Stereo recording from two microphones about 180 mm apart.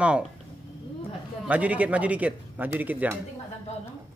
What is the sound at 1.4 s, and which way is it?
A man's voice, 10° right (ahead or behind).